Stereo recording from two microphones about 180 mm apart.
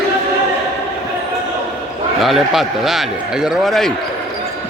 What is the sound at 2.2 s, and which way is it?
A man's voice, centre (ahead or behind).